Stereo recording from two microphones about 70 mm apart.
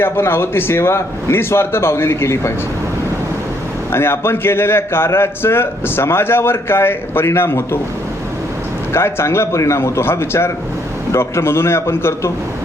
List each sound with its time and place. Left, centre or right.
0.0 s a man's voice: left
3.9 s a man's voice: left
8.9 s a man's voice: left